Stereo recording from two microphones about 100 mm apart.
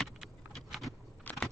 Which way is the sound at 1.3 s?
15° left (ahead or behind).